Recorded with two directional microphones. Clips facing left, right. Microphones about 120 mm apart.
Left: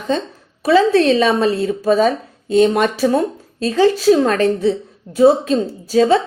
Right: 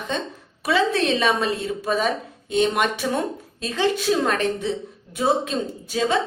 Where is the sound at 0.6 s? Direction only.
35° left (ahead or behind).